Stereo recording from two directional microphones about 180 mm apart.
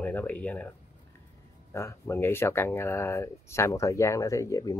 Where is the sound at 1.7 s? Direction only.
15° left (ahead or behind).